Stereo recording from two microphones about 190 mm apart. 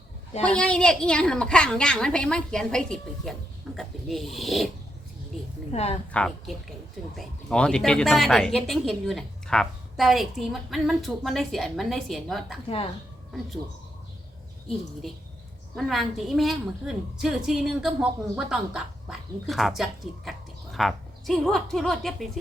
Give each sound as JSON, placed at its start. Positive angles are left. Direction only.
{"t": 0.4, "sound": "a woman's voice", "side_deg": 5}
{"t": 5.7, "sound": "speech", "side_deg": 35}
{"t": 6.1, "sound": "a woman's voice", "side_deg": 5}
{"t": 12.6, "sound": "speech", "side_deg": 30}
{"t": 15.7, "sound": "a woman's voice", "side_deg": 0}